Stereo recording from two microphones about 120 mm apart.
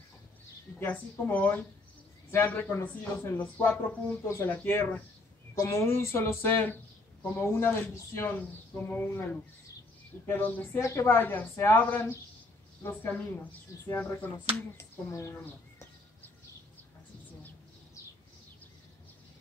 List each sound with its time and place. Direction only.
0.7 s speech: 15° left (ahead or behind)
13.8 s speech: 15° left (ahead or behind)